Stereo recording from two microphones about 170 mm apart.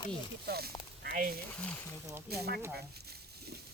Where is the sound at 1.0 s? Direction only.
55° right (ahead or behind).